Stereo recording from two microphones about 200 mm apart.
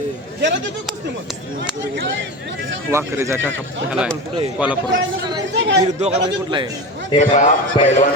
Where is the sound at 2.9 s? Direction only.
15° right (ahead or behind).